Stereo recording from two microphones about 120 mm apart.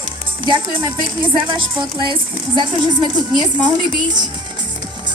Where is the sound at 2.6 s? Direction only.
40° right (ahead or behind).